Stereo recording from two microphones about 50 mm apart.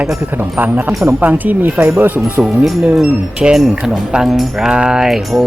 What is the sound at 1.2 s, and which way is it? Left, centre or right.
Speech, right.